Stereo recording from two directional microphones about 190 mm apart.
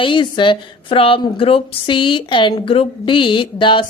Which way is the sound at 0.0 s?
25° left (ahead or behind).